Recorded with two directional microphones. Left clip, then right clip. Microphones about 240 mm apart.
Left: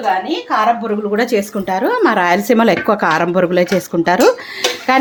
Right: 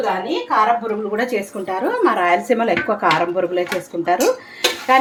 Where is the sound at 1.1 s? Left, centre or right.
Left.